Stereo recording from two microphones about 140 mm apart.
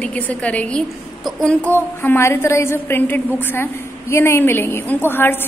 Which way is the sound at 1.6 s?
15° left (ahead or behind).